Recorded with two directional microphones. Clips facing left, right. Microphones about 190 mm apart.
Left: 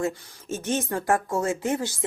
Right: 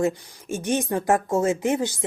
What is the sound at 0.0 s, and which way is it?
Speech, 15° right (ahead or behind).